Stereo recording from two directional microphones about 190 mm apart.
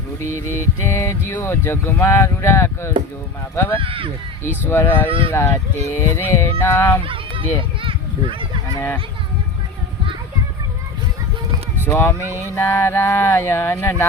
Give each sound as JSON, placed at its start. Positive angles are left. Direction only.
{"t": 0.9, "sound": "speech", "side_deg": 15}
{"t": 3.8, "sound": "speech", "side_deg": -30}
{"t": 4.4, "sound": "speech", "side_deg": 10}
{"t": 7.0, "sound": "children playing", "side_deg": -30}
{"t": 11.9, "sound": "speech", "side_deg": 10}